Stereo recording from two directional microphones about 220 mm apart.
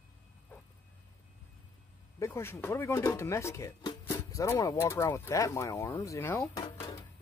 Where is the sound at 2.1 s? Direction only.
15° left (ahead or behind).